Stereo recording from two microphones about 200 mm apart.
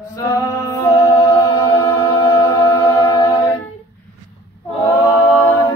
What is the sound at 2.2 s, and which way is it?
Mantra, 15° left (ahead or behind).